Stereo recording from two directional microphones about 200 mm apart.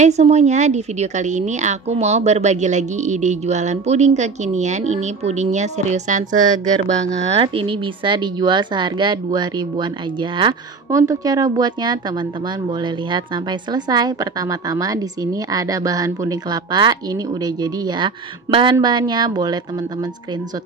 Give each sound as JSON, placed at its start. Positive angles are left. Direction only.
{"t": 0.0, "sound": "a woman's voice", "side_deg": -35}
{"t": 7.3, "sound": "a woman's voice", "side_deg": -25}